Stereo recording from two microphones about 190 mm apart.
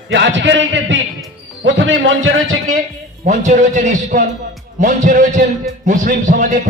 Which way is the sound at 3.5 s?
40° right (ahead or behind).